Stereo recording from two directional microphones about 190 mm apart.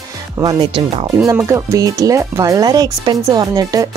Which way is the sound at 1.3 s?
15° right (ahead or behind).